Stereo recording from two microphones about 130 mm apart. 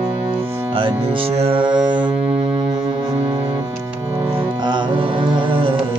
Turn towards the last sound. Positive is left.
turn(degrees=-40)  # may be behind; listen again after turning